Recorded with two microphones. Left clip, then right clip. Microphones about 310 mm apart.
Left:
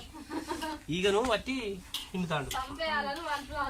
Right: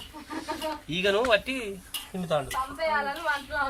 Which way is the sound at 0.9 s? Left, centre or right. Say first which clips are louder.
Right 5 dB; left.